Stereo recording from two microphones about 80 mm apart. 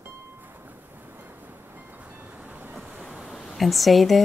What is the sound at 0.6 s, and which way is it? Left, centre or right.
Train, right.